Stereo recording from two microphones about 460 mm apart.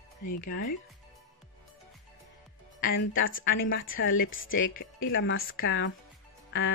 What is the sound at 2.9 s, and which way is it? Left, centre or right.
A woman's voice, left.